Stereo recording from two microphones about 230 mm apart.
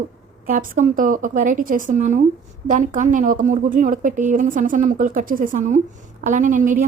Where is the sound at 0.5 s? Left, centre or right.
Right.